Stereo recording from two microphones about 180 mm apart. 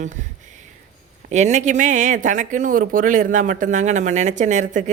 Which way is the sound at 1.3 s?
40° right (ahead or behind).